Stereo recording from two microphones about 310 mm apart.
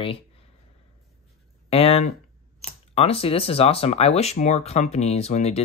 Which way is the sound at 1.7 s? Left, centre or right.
Centre.